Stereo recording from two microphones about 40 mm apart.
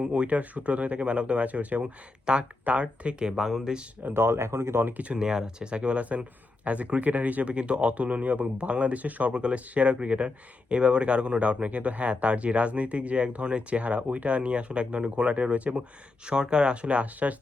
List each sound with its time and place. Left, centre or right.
0.0 s speech: right
2.3 s speech: right
2.7 s speech: right
3.0 s speech: right
4.1 s speech: right
5.0 s speech: right
9.3 s speech: right
16.2 s speech: right